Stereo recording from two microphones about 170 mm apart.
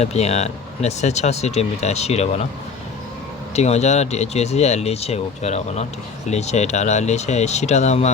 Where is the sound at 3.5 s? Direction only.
40° left (ahead or behind).